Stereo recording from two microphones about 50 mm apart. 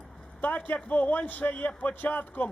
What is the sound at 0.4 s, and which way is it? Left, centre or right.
A man's voice, left.